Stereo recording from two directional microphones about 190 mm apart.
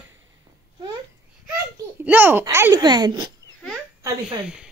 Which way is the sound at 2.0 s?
10° right (ahead or behind).